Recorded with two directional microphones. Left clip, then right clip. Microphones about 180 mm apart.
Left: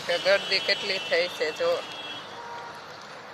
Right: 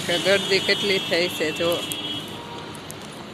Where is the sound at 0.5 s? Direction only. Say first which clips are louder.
Right 5 dB; 5° left (ahead or behind).